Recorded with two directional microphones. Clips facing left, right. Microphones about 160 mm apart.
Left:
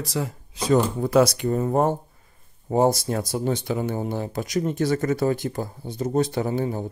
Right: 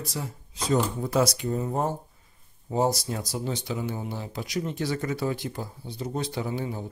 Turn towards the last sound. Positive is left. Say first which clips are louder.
# left 6 dB
turn(degrees=50)  # may be behind; listen again after turning